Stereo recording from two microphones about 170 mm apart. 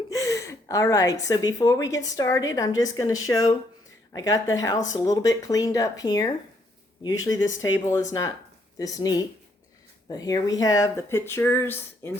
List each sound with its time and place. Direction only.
0.1 s gasp: 20° left (ahead or behind)
1.3 s a woman's voice: 20° left (ahead or behind)
7.3 s speech: 90° left
7.6 s a woman's voice: 20° left (ahead or behind)